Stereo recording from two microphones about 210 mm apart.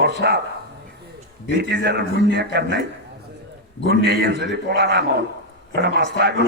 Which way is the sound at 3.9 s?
50° right (ahead or behind).